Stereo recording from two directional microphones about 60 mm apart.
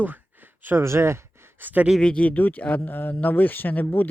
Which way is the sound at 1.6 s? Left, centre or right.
Right.